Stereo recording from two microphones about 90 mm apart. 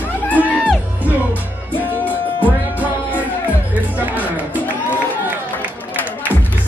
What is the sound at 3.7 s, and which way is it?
Music, 20° right (ahead or behind).